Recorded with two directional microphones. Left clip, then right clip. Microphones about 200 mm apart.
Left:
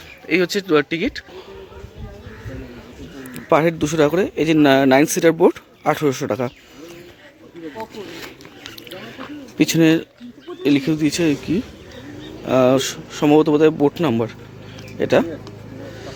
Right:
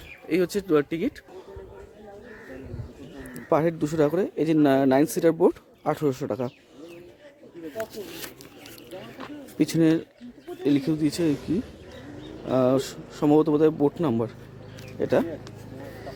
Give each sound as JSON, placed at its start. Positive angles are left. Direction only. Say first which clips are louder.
{"t": 0.3, "sound": "speech", "louder": "left 6 dB", "side_deg": 0}
{"t": 3.3, "sound": "speech", "louder": "left 7 dB", "side_deg": 0}
{"t": 9.6, "sound": "speech", "louder": "left 7 dB", "side_deg": 0}